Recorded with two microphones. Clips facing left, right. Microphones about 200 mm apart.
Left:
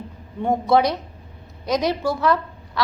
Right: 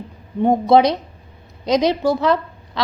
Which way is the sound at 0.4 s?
20° right (ahead or behind).